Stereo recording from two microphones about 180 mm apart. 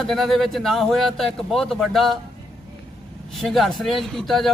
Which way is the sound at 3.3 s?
Centre (ahead or behind).